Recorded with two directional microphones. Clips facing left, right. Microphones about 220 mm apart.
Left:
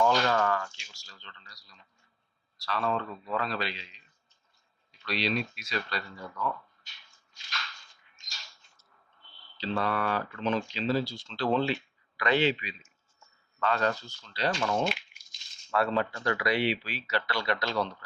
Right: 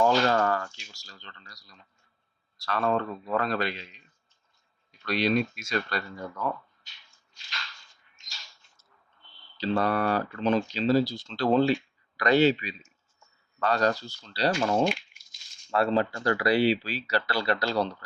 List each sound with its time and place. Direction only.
0.0 s speech: 35° right (ahead or behind)
9.6 s speech: 40° right (ahead or behind)
14.8 s a sound: 5° right (ahead or behind)
15.7 s speech: 30° right (ahead or behind)